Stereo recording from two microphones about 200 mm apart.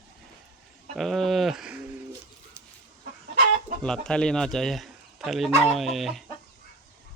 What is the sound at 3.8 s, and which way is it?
Speech, 5° left (ahead or behind).